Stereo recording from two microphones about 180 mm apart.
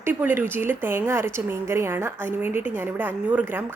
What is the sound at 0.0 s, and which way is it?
A woman's voice, 10° right (ahead or behind).